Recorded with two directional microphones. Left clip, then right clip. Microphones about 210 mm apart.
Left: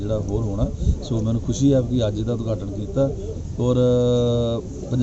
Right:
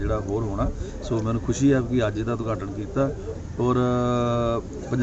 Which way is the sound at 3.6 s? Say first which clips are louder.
Left 5 dB; 25° right (ahead or behind).